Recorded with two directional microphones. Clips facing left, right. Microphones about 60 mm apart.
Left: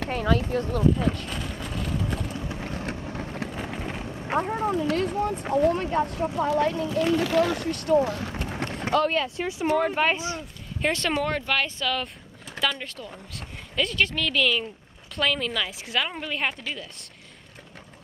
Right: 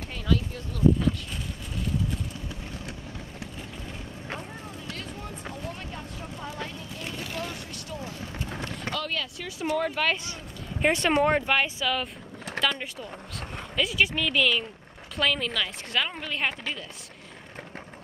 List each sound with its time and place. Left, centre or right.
0.1 s speech: left
1.3 s vehicle: left
2.3 s vehicle: left
3.3 s vehicle: left
4.4 s speech: left
4.8 s speech: left
6.2 s speech: left
8.9 s speech: left; by 10.3 s centre
10.8 s a woman's voice: centre